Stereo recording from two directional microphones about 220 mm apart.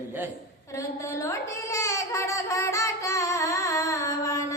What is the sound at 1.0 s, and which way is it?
Speech, 15° left (ahead or behind).